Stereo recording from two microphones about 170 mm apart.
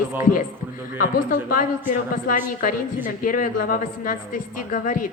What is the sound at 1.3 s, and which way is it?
A woman's voice, 50° left (ahead or behind).